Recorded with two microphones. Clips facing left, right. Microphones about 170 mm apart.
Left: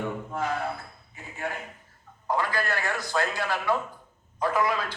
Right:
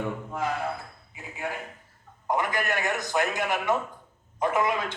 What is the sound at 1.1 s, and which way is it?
A man's voice, 10° right (ahead or behind).